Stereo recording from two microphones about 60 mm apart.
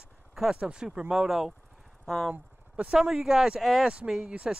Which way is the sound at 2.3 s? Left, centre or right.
Right.